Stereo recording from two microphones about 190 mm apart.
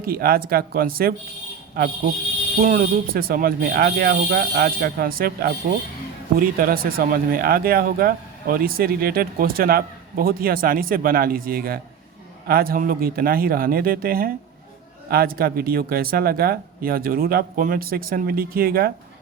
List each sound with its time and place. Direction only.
0.0 s speech: 50° right (ahead or behind)